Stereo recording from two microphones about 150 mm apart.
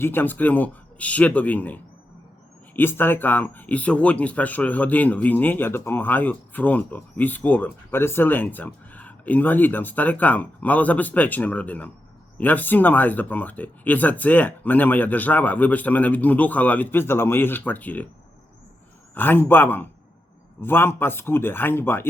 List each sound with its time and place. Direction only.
0.0 s speech: 15° left (ahead or behind)
19.1 s speech: 15° left (ahead or behind)